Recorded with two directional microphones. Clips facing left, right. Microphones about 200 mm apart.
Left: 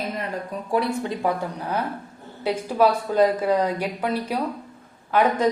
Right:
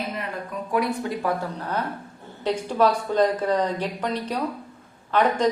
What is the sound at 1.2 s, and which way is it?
A woman's voice, 15° left (ahead or behind).